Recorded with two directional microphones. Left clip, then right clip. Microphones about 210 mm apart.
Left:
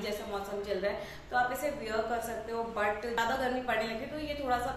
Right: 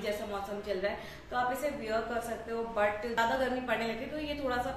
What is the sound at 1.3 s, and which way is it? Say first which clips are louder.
Speech: left 1 dB; centre (ahead or behind).